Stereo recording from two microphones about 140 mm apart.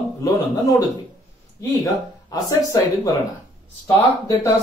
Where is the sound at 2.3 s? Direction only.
25° left (ahead or behind).